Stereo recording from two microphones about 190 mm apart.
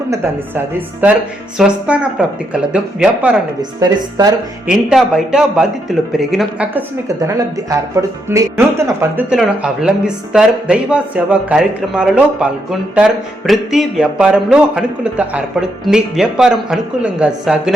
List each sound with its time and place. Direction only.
1.5 s speech: 5° right (ahead or behind)
3.6 s speech: 20° right (ahead or behind)
4.7 s speech: 5° right (ahead or behind)
7.3 s speech: 15° right (ahead or behind)